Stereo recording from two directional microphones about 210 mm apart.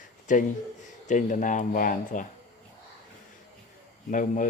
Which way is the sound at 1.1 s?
35° left (ahead or behind).